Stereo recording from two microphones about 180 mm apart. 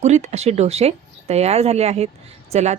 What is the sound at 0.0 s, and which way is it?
A woman's voice, 40° right (ahead or behind).